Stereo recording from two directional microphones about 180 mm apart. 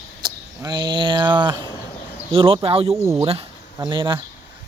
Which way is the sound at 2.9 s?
15° right (ahead or behind).